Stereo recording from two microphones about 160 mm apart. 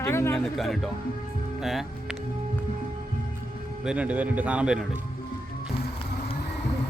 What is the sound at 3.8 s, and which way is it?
Speech, 5° right (ahead or behind).